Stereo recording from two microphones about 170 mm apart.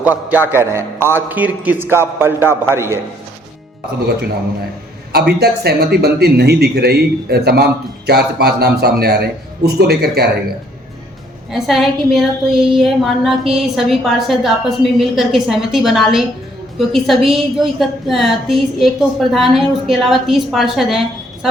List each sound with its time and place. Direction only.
0.0 s a man's voice: 10° right (ahead or behind)
5.1 s speech: 70° right (ahead or behind)
11.5 s a woman's voice: centre (ahead or behind)